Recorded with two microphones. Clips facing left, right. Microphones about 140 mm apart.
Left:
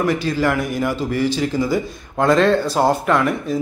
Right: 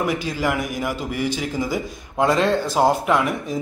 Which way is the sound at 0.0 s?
15° right (ahead or behind).